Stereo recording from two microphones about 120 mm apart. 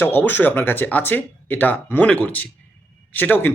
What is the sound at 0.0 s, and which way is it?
A man's voice, 15° left (ahead or behind).